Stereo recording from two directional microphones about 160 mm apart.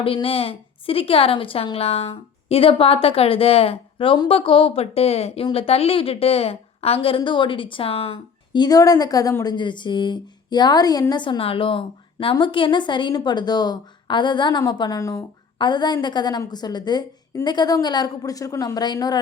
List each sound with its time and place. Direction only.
0.0 s a woman's voice: 35° left (ahead or behind)
8.5 s a woman's voice: 25° left (ahead or behind)